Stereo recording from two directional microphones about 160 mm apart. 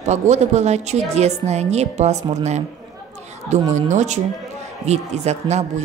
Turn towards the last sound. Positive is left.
turn(degrees=-45)  # may be behind; listen again after turning